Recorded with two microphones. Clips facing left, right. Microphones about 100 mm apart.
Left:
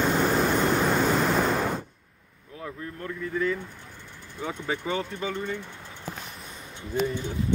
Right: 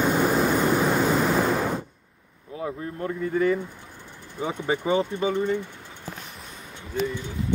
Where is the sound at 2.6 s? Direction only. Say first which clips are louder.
Right 6 dB; 25° right (ahead or behind).